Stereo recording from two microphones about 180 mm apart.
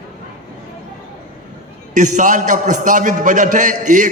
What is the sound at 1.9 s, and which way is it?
A man's voice, 45° right (ahead or behind).